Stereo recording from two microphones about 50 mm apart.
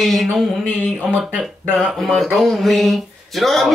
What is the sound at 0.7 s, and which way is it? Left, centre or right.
Speech, centre.